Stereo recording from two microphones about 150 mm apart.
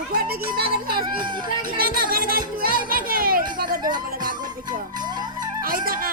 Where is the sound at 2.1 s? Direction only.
75° right (ahead or behind).